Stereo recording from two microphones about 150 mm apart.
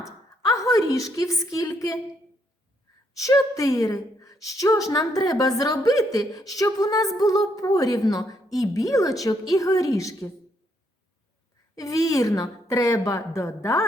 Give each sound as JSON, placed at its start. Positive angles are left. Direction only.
{"t": 0.4, "sound": "a woman's voice", "side_deg": 20}
{"t": 3.2, "sound": "a woman's voice", "side_deg": 20}
{"t": 11.7, "sound": "a woman's voice", "side_deg": 25}